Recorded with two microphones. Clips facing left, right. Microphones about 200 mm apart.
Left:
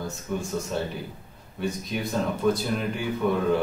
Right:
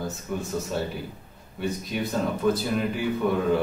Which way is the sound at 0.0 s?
5° right (ahead or behind).